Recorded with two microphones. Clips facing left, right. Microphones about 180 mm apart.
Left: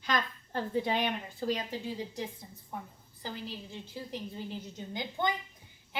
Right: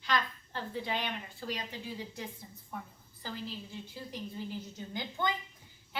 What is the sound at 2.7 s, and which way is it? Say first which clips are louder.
A woman's voice: left 2 dB; 25° left (ahead or behind).